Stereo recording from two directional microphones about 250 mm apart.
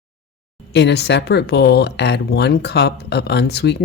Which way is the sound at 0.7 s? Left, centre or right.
Left.